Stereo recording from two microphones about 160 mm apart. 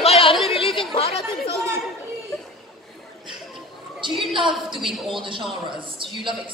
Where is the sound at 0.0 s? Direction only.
35° left (ahead or behind).